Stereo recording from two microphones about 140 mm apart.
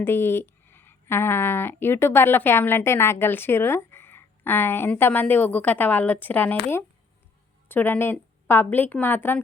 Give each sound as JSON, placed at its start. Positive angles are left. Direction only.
{"t": 0.0, "sound": "speech", "side_deg": 15}